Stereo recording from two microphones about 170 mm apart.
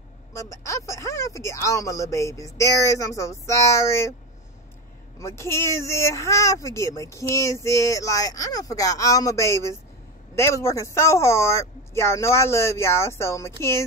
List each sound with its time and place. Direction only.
0.3 s speech: 15° left (ahead or behind)
5.2 s speech: 15° left (ahead or behind)